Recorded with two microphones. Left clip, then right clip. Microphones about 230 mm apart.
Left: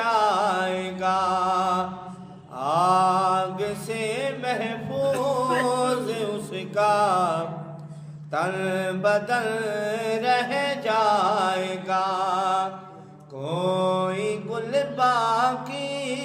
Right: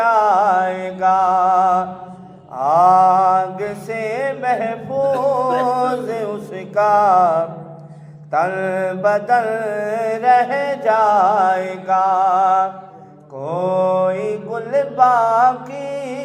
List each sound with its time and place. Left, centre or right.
0.0 s music: centre
2.6 s mantra: centre
5.6 s singing: centre
6.6 s mantra: centre